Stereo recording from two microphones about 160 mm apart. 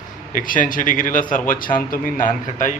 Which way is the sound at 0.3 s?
55° left (ahead or behind).